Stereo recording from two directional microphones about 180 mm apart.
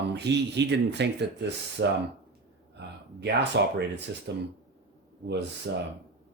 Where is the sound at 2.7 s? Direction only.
70° right (ahead or behind).